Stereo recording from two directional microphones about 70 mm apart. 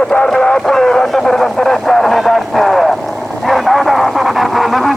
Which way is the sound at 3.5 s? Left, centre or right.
Centre.